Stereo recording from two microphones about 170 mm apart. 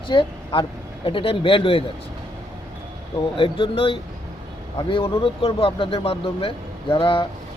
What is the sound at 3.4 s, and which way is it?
Speech, 30° left (ahead or behind).